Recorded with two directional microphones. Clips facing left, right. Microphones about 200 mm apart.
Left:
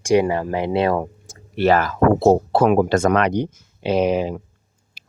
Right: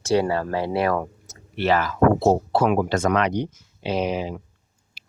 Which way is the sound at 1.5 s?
45° left (ahead or behind).